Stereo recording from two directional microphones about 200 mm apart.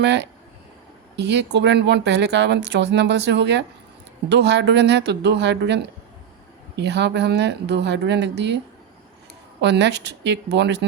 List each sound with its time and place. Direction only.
0.0 s speech: 60° right (ahead or behind)